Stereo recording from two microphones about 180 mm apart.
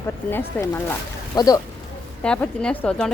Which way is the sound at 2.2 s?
5° left (ahead or behind).